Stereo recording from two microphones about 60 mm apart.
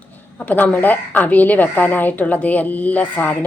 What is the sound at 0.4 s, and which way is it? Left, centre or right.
A woman's voice, left.